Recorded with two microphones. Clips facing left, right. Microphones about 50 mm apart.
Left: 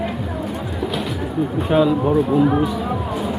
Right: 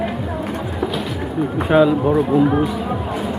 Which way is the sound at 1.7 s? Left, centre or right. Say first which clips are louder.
Right 3 dB; centre.